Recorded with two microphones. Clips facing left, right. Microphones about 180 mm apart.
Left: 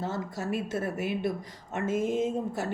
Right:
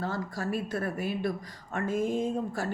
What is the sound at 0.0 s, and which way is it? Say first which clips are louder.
Speech: even; 20° left (ahead or behind).